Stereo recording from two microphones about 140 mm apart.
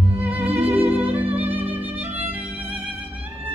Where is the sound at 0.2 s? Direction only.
10° right (ahead or behind).